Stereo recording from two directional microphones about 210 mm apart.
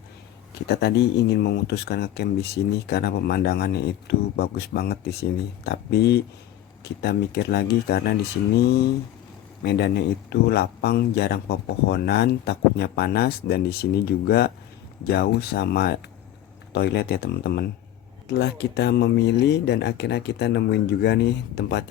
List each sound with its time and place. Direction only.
0.7 s speech: 50° left (ahead or behind)